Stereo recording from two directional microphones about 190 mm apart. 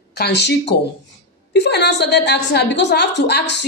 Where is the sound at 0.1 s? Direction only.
60° left (ahead or behind).